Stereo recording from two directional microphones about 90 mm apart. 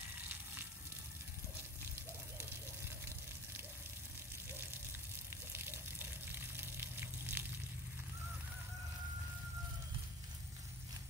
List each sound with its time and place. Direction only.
5.3 s water: 25° right (ahead or behind)